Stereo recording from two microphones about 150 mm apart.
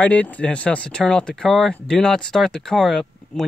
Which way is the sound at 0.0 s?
10° left (ahead or behind).